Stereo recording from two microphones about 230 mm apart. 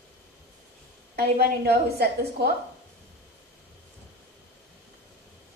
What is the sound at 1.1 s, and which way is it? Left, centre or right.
A woman's voice, right.